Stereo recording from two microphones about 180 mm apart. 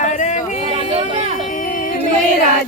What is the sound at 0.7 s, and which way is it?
Speech, 30° right (ahead or behind).